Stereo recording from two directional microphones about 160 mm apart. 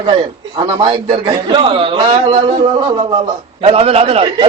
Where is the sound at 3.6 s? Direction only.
40° right (ahead or behind).